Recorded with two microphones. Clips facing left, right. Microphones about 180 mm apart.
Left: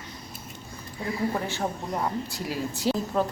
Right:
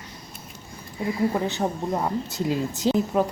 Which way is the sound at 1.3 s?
20° right (ahead or behind).